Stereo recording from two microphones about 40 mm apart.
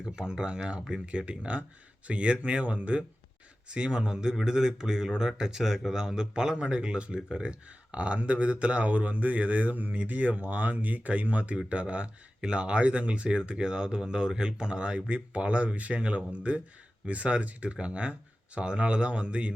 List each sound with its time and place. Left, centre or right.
0.0 s speech: centre